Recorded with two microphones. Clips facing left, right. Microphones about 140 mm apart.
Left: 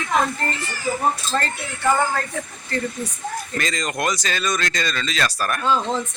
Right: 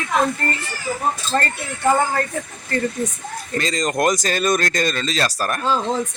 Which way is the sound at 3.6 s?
35° right (ahead or behind).